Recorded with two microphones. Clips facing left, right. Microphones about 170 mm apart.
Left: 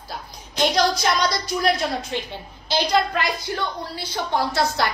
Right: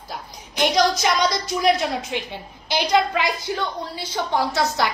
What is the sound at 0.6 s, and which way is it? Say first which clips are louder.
A woman's voice: right 1 dB; 15° right (ahead or behind).